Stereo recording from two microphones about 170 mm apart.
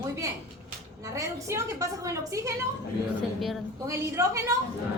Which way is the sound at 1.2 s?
20° right (ahead or behind).